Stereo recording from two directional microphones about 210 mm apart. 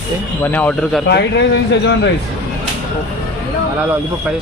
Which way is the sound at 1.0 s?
55° left (ahead or behind).